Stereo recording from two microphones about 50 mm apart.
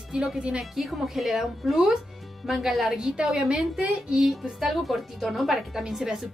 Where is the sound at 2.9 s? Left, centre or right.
Centre.